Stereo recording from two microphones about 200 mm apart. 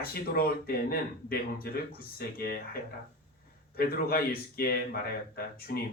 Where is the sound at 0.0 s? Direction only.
50° left (ahead or behind).